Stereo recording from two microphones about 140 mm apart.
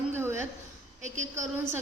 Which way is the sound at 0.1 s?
15° right (ahead or behind).